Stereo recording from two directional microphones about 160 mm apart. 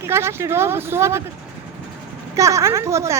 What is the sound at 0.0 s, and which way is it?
Speech, 15° right (ahead or behind).